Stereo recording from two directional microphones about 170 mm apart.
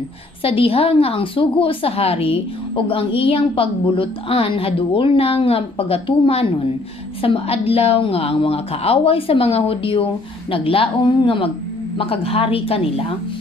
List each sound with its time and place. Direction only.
0.4 s a woman's voice: 35° left (ahead or behind)